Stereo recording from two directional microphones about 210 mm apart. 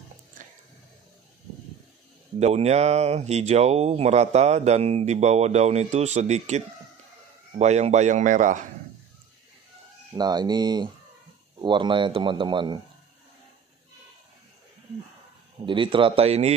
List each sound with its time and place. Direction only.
2.3 s speech: 30° right (ahead or behind)
10.1 s speech: 20° right (ahead or behind)
15.6 s speech: 25° right (ahead or behind)